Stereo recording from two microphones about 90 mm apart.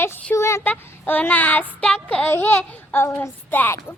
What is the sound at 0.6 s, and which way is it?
Speech, 20° left (ahead or behind).